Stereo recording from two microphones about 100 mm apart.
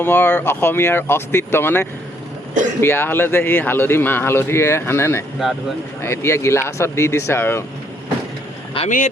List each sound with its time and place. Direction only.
0.0 s a man's voice: 20° left (ahead or behind)
8.8 s speech: 70° left (ahead or behind)